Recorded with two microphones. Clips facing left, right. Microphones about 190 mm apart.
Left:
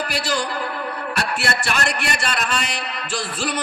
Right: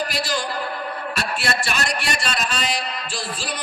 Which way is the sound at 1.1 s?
65° left (ahead or behind).